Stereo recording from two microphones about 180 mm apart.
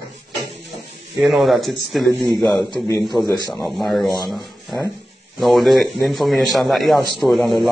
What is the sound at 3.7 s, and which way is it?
Speech, centre (ahead or behind).